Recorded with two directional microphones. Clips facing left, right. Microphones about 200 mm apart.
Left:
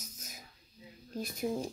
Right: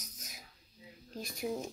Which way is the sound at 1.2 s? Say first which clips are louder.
Left 3 dB; centre (ahead or behind).